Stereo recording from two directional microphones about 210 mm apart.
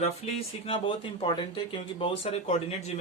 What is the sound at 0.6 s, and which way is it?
Speech, 25° left (ahead or behind).